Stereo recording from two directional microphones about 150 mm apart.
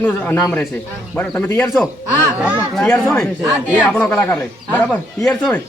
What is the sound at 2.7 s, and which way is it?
A man's voice, 5° left (ahead or behind).